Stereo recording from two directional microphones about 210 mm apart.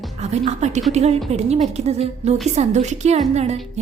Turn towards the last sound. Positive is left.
turn(degrees=-30)  # may be behind; listen again after turning